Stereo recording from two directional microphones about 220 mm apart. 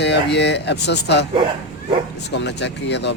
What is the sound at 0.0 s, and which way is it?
Speech, 50° left (ahead or behind).